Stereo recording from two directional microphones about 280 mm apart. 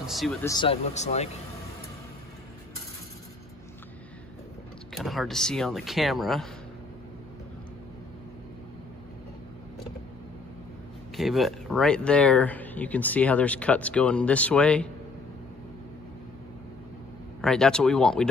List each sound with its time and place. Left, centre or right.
0.0 s speech: centre
0.5 s speech: centre
4.9 s speech: centre
11.1 s speech: centre
17.4 s speech: centre